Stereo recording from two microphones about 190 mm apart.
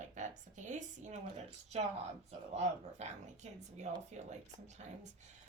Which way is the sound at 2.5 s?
35° right (ahead or behind).